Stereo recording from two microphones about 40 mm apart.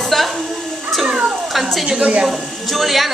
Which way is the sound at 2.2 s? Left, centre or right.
Centre.